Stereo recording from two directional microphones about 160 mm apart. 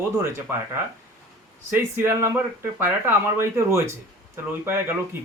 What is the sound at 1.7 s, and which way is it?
Speech, 15° right (ahead or behind).